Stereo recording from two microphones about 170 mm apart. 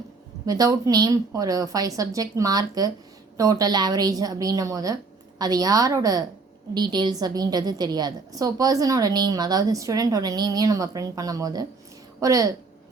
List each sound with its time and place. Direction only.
0.4 s a woman's voice: 20° right (ahead or behind)